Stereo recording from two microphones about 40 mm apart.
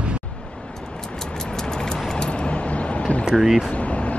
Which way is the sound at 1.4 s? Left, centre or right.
Centre.